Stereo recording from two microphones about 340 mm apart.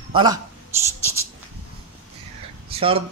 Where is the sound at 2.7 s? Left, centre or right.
Centre.